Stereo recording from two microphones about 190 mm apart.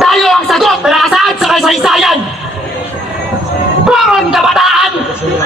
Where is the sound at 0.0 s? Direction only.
Centre (ahead or behind).